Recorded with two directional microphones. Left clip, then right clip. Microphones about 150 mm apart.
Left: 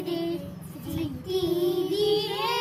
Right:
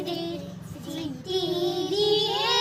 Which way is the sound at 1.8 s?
5° left (ahead or behind).